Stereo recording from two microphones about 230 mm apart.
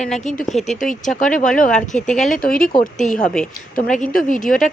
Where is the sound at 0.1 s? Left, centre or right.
Left.